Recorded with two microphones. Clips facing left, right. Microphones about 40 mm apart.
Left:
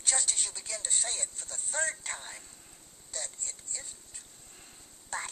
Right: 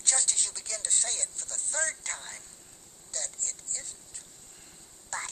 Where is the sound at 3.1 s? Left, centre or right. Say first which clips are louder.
Right 2 dB; centre.